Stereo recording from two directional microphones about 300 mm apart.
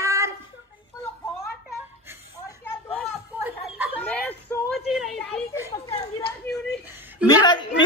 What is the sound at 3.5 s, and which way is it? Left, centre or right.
Chuckle, centre.